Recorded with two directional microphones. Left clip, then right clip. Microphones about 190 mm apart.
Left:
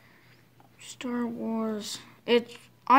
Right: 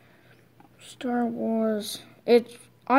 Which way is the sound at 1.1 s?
5° right (ahead or behind).